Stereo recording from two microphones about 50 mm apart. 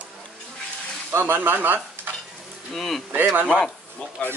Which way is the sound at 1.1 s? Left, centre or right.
Right.